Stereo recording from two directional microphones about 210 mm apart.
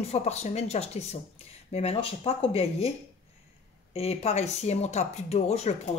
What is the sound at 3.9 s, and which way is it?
Speech, 30° left (ahead or behind).